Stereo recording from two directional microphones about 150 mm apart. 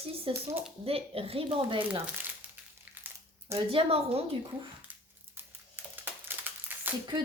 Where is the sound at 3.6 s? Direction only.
40° right (ahead or behind).